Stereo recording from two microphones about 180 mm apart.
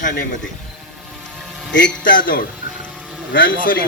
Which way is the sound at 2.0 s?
50° left (ahead or behind).